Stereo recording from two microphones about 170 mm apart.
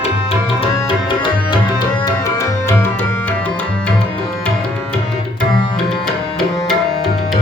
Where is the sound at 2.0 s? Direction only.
15° left (ahead or behind).